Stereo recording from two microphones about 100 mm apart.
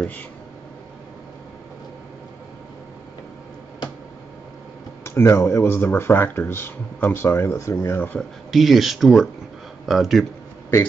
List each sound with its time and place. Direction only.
5.0 s speech: 25° left (ahead or behind)
8.2 s speech: centre (ahead or behind)